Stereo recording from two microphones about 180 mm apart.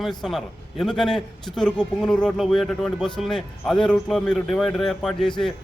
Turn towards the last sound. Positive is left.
turn(degrees=0)  # may be behind; listen again after turning